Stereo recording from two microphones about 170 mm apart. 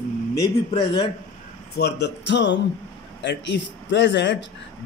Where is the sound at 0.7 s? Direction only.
30° left (ahead or behind).